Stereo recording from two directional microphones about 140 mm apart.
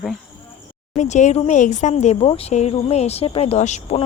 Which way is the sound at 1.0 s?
60° left (ahead or behind).